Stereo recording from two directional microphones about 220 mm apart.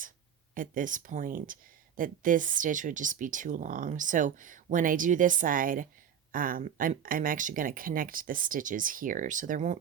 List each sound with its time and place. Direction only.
0.5 s speech: 40° right (ahead or behind)